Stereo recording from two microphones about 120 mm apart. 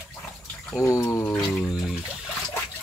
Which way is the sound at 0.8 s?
25° left (ahead or behind).